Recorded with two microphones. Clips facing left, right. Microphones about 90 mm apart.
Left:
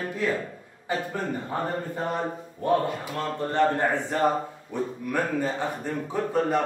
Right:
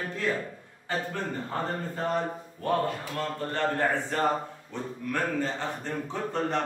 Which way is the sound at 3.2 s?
20° left (ahead or behind).